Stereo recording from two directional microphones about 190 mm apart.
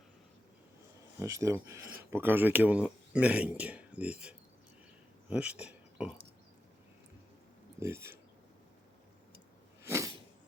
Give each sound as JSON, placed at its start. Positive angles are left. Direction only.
{"t": 1.2, "sound": "speech", "side_deg": -15}
{"t": 7.8, "sound": "speech", "side_deg": -15}
{"t": 9.8, "sound": "a sound", "side_deg": -15}